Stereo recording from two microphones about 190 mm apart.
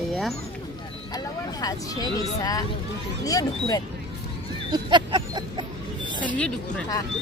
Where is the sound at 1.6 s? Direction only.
20° left (ahead or behind).